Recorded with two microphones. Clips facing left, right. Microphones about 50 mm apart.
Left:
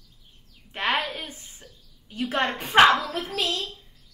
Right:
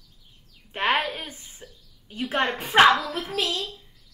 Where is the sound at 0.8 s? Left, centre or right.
Right.